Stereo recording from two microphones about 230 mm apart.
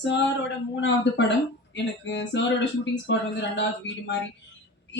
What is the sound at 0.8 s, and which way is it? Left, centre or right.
Speech, left.